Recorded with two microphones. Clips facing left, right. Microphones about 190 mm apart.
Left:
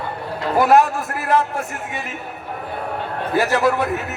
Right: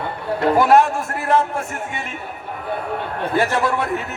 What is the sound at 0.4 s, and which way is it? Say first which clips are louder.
Speech: right 3 dB; 60° right (ahead or behind).